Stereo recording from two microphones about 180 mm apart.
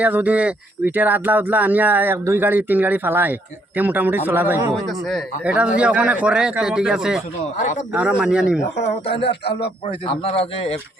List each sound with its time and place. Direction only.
0.0 s speech: 10° right (ahead or behind)
4.7 s a man's voice: centre (ahead or behind)
8.2 s a man's voice: 5° right (ahead or behind)
9.2 s a man's voice: 65° left (ahead or behind)
10.1 s a man's voice: 35° left (ahead or behind)